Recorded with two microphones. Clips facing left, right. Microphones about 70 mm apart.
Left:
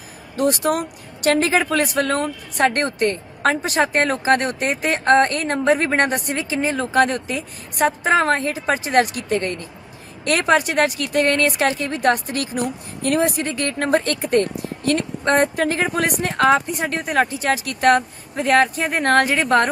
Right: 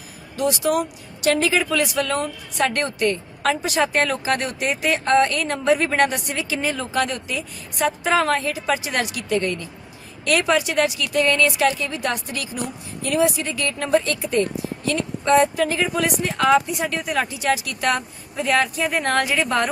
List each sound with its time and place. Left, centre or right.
0.3 s a woman's voice: left